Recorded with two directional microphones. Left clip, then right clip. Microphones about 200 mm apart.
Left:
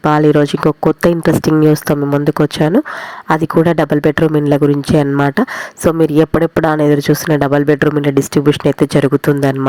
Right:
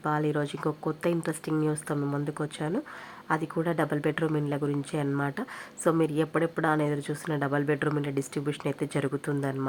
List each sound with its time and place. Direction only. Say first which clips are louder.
0.0 s speech: left 18 dB; 35° left (ahead or behind)